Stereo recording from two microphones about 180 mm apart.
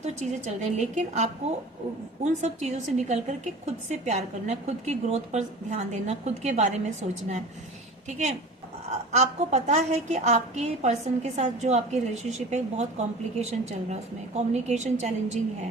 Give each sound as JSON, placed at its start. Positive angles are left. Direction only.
{"t": 0.0, "sound": "a woman's voice", "side_deg": -40}
{"t": 8.9, "sound": "a woman's voice", "side_deg": -40}